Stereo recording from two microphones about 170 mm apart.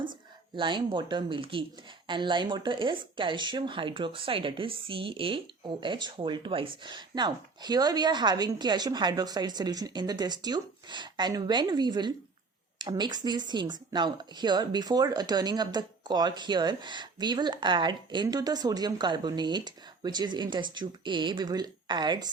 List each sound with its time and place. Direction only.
0.5 s speech: 30° right (ahead or behind)